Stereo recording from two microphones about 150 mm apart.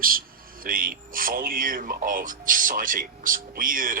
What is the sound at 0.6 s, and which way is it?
Speech, 70° right (ahead or behind).